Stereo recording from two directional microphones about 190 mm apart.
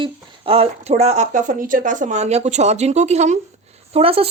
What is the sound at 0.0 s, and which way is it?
Speech, 30° right (ahead or behind).